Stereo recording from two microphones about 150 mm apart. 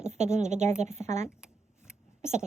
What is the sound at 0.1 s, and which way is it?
A woman's voice, 50° right (ahead or behind).